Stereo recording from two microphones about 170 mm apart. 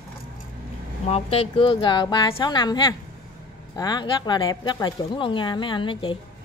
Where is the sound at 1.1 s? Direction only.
35° left (ahead or behind).